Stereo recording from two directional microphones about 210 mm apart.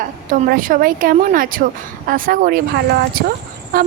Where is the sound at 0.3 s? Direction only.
40° right (ahead or behind).